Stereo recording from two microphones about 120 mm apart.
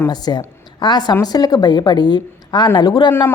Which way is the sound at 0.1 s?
35° left (ahead or behind).